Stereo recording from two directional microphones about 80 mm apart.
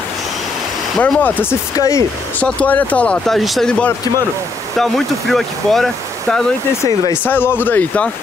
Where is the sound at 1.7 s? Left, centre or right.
Left.